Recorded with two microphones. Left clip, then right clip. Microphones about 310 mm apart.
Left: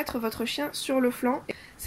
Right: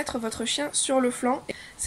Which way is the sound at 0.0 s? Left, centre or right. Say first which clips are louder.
Even; right.